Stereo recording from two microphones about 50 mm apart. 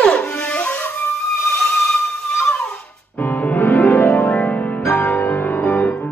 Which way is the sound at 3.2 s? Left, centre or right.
Left.